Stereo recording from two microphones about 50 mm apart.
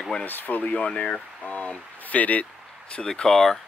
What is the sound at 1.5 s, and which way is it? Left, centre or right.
Speech, left.